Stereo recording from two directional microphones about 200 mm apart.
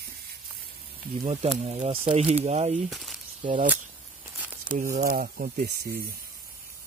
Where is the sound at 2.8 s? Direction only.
Centre (ahead or behind).